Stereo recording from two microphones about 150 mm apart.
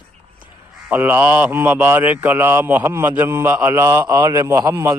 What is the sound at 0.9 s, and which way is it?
A man's voice, 15° right (ahead or behind).